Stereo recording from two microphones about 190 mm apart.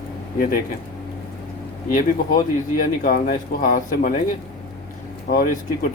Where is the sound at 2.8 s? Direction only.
45° left (ahead or behind).